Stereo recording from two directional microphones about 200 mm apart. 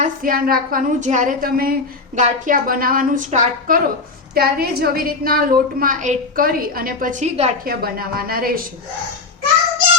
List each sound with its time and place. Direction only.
0.0 s a woman's voice: 45° right (ahead or behind)
4.4 s a woman's voice: 50° right (ahead or behind)
7.8 s a woman's voice: 50° right (ahead or behind)